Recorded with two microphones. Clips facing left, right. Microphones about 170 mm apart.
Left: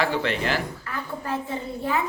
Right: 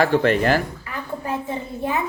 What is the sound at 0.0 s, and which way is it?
Speech, 50° right (ahead or behind).